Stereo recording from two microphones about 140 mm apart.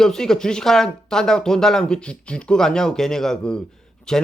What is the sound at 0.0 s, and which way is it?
Speech, 5° left (ahead or behind).